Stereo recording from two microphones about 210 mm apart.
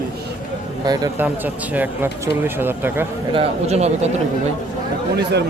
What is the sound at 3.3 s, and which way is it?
Speech, 30° right (ahead or behind).